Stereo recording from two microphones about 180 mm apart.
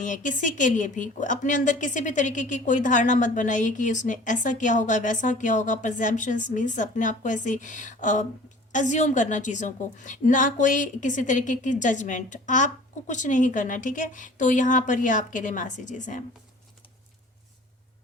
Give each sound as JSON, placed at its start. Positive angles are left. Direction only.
{"t": 0.0, "sound": "a woman's voice", "side_deg": 45}